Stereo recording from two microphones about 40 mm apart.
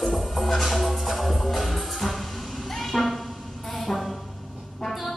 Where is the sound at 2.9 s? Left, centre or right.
Centre.